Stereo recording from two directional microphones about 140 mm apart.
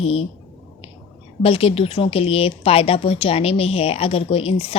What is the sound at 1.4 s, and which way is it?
A woman's voice, 45° left (ahead or behind).